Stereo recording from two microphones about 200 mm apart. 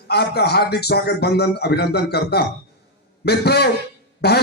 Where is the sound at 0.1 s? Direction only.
55° left (ahead or behind).